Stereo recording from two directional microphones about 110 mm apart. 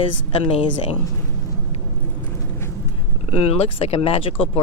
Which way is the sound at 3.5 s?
65° left (ahead or behind).